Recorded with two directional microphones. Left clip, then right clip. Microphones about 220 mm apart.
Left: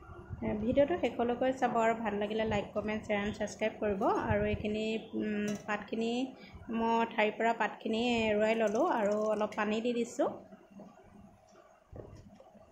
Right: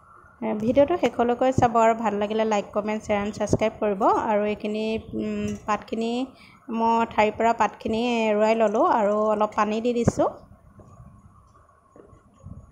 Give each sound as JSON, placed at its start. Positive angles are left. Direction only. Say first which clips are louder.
{"t": 0.4, "sound": "a woman's voice", "louder": "right 9 dB", "side_deg": -30}